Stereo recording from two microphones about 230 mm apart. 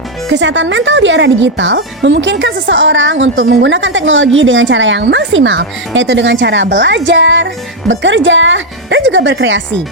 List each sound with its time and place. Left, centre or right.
0.3 s speech: right